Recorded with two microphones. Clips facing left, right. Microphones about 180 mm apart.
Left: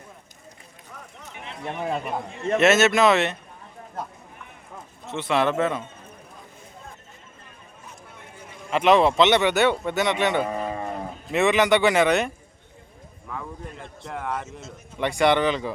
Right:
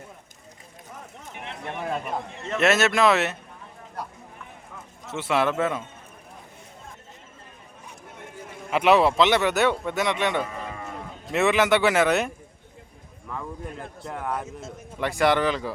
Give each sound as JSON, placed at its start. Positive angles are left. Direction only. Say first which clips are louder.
{"t": 1.6, "sound": "a man's voice", "louder": "left 2 dB", "side_deg": 20}
{"t": 2.6, "sound": "a man's voice", "louder": "left 2 dB", "side_deg": 0}
{"t": 5.1, "sound": "speech", "louder": "left 1 dB", "side_deg": -10}
{"t": 8.7, "sound": "a man's voice", "louder": "left 1 dB", "side_deg": -10}
{"t": 10.6, "sound": "livestock", "louder": "left 7 dB", "side_deg": 40}
{"t": 11.3, "sound": "a man's voice", "louder": "left 1 dB", "side_deg": 0}
{"t": 13.8, "sound": "a man's voice", "louder": "left 1 dB", "side_deg": -5}